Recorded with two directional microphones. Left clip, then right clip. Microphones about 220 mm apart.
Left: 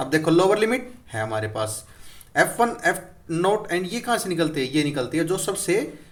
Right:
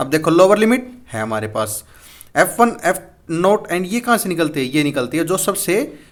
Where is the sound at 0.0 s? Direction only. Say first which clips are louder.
Right 7 dB; 35° right (ahead or behind).